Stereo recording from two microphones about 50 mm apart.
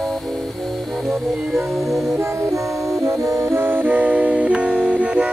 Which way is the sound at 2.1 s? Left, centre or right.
Right.